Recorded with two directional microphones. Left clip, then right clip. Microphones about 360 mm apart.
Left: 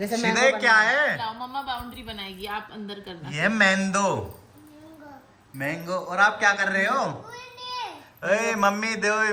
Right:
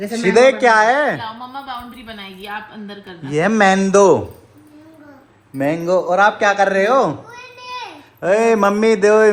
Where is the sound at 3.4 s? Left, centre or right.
Centre.